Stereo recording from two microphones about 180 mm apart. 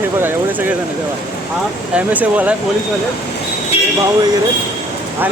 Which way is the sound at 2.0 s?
10° right (ahead or behind).